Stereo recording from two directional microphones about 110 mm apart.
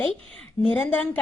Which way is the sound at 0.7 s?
15° left (ahead or behind).